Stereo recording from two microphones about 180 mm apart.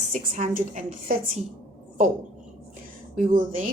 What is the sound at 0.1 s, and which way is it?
A woman's voice, 45° right (ahead or behind).